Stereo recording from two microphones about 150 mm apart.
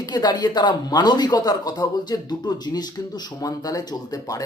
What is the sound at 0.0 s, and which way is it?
Speech, 25° left (ahead or behind).